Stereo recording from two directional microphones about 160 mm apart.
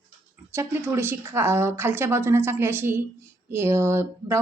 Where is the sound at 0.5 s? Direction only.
15° right (ahead or behind).